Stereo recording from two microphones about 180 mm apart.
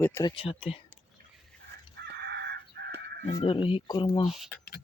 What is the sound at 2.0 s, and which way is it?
Crow, 70° right (ahead or behind).